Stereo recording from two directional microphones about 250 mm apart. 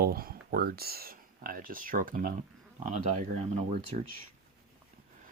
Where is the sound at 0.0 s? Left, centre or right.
Right.